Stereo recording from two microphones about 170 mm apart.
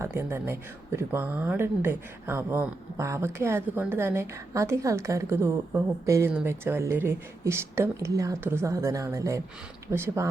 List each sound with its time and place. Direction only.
0.0 s speech: 15° right (ahead or behind)